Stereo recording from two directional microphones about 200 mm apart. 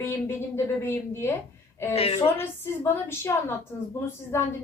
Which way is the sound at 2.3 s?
10° left (ahead or behind).